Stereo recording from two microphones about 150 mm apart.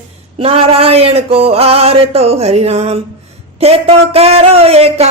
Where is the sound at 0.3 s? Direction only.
40° right (ahead or behind).